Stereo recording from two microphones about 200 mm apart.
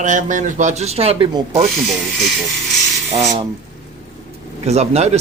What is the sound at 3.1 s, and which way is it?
Speech, 35° right (ahead or behind).